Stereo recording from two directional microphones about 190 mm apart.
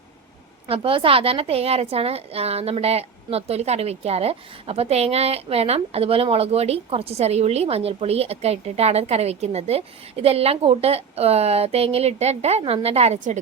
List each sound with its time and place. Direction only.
0.7 s a woman's voice: 30° right (ahead or behind)